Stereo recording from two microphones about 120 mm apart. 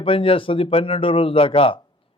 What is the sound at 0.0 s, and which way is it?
A man's voice, 50° left (ahead or behind).